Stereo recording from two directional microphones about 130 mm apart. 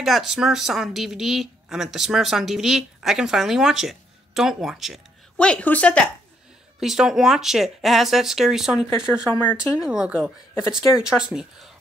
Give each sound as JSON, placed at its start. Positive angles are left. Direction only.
{"t": 0.0, "sound": "speech", "side_deg": 0}
{"t": 6.8, "sound": "speech", "side_deg": -5}
{"t": 9.3, "sound": "speech", "side_deg": 15}
{"t": 9.8, "sound": "a woman's voice", "side_deg": -5}